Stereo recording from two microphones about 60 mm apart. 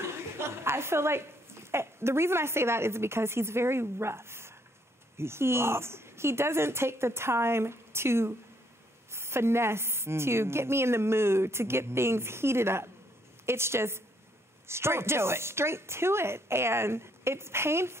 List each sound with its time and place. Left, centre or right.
0.0 s a woman's voice: right